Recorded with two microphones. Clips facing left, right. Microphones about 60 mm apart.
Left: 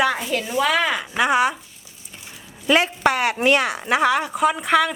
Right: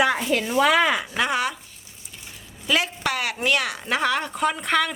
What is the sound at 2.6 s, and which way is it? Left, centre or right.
A woman's voice, left.